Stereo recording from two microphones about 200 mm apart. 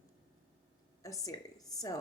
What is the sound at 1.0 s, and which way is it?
Speech, 15° left (ahead or behind).